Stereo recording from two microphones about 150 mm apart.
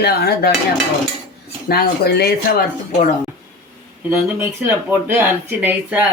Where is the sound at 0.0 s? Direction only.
90° left.